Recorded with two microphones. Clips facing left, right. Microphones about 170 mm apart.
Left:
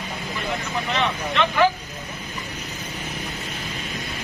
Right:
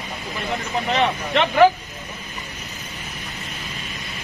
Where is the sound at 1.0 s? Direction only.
50° right (ahead or behind).